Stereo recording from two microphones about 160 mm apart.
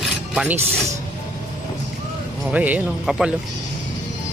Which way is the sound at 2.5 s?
10° right (ahead or behind).